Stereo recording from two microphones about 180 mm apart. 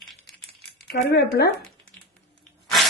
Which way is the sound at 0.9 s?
65° left (ahead or behind).